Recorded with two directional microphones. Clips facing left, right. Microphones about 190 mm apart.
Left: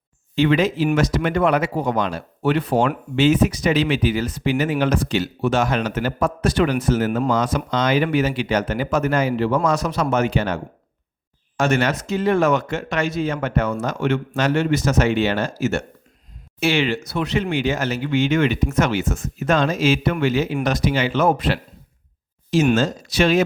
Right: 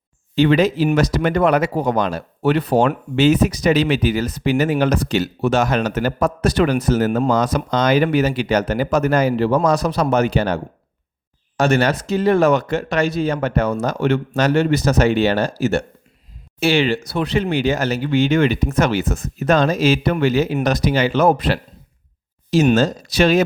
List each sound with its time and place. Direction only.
0.3 s speech: 35° right (ahead or behind)
22.7 s speech: 35° right (ahead or behind)